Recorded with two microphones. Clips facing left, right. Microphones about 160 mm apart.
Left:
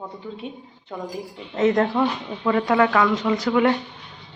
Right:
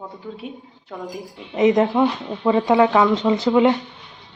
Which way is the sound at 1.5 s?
15° right (ahead or behind).